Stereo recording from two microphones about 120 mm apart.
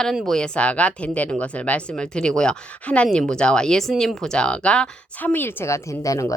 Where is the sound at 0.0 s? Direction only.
Centre (ahead or behind).